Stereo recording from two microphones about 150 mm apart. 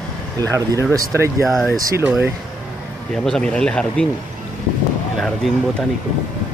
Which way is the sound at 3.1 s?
5° left (ahead or behind).